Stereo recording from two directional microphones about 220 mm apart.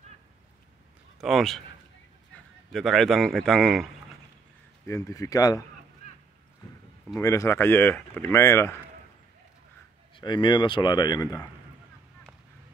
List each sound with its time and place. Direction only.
1.2 s speech: centre (ahead or behind)
2.7 s speech: centre (ahead or behind)
4.8 s speech: 15° left (ahead or behind)
7.2 s speech: 15° left (ahead or behind)
10.1 s a man's voice: 20° left (ahead or behind)